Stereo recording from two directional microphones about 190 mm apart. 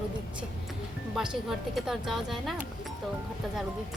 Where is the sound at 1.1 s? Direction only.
Centre (ahead or behind).